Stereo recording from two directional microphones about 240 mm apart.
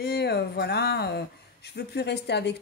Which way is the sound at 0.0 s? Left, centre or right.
Left.